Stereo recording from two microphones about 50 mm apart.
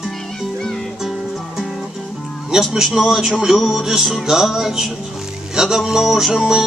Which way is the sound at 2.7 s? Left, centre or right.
Centre.